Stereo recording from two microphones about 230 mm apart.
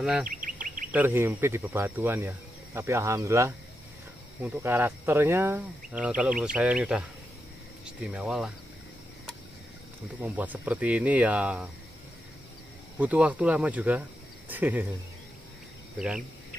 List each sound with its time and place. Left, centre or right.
0.0 s speech: centre
0.3 s bird: right
0.9 s speech: centre
10.2 s speech: centre
13.0 s speech: centre